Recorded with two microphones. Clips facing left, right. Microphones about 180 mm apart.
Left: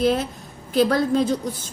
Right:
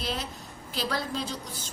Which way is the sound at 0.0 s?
50° left (ahead or behind).